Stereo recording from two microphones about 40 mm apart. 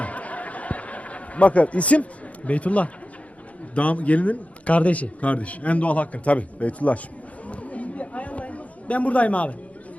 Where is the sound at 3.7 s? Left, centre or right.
Left.